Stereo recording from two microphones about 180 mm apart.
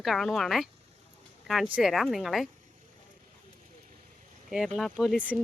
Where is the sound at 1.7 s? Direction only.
Centre (ahead or behind).